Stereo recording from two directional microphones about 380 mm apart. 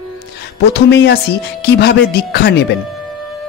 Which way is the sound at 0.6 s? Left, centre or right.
Left.